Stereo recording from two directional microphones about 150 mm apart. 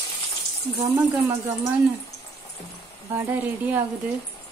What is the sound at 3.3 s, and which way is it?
Speech, 15° right (ahead or behind).